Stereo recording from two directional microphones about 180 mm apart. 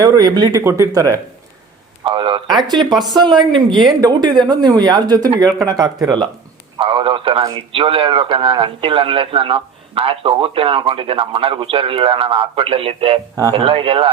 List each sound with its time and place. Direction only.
0.0 s a man's voice: 20° right (ahead or behind)
2.0 s a man's voice: 30° right (ahead or behind)
2.9 s speech: centre (ahead or behind)
3.2 s a man's voice: 25° right (ahead or behind)